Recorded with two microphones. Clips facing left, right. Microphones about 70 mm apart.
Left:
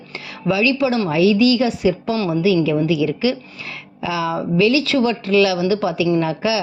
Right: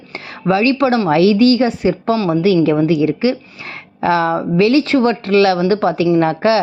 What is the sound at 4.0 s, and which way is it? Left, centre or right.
Speech, right.